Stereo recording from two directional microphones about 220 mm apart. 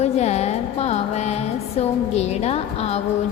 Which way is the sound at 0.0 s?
30° left (ahead or behind).